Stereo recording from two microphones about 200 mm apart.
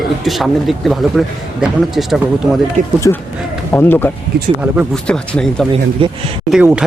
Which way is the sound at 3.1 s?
15° left (ahead or behind).